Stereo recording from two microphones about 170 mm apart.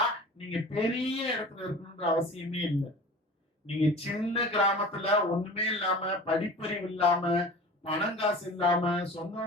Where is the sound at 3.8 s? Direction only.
35° left (ahead or behind).